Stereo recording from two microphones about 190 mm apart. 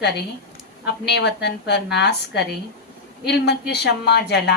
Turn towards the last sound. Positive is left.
turn(degrees=60)  # may be behind; listen again after turning